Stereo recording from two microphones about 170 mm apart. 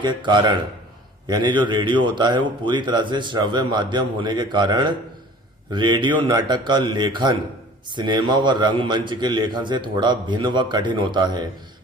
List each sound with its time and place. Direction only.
0.0 s speech: 25° right (ahead or behind)